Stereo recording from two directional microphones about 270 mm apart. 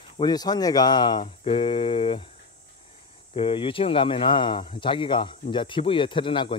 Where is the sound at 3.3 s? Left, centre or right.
Centre.